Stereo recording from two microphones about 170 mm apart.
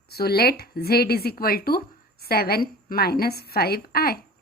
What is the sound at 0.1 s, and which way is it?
A woman's voice, 70° left (ahead or behind).